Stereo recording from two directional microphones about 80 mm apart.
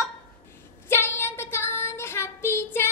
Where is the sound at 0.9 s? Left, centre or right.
Left.